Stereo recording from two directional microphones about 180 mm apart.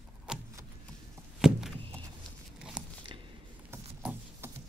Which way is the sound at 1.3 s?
Centre (ahead or behind).